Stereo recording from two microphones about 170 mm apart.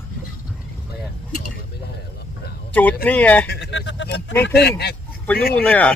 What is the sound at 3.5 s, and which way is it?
Speech, 85° left.